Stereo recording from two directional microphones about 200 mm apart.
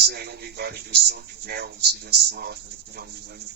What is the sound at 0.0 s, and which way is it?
Speech, 55° right (ahead or behind).